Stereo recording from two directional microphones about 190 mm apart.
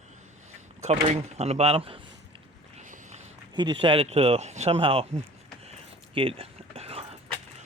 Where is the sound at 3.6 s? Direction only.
25° right (ahead or behind).